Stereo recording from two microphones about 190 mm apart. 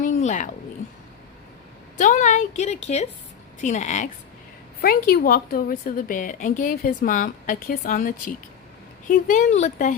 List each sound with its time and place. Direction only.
0.0 s a sound: 40° left (ahead or behind)
2.0 s a woman's voice: 40° left (ahead or behind)
4.8 s a woman's voice: 50° left (ahead or behind)